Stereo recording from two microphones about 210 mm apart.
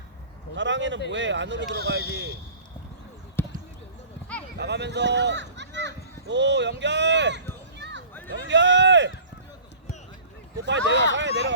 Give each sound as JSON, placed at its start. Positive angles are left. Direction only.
{"t": 0.5, "sound": "speech", "side_deg": -60}
{"t": 3.4, "sound": "basketball bounce", "side_deg": 10}
{"t": 4.5, "sound": "speech", "side_deg": -55}
{"t": 7.8, "sound": "run", "side_deg": -55}
{"t": 8.3, "sound": "speech", "side_deg": -60}
{"t": 10.7, "sound": "speech", "side_deg": -60}